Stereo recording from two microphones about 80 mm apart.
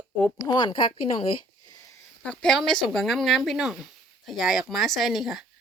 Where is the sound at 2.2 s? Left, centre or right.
Centre.